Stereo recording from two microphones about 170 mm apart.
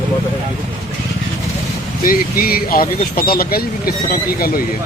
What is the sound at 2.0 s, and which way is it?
Speech, 60° left (ahead or behind).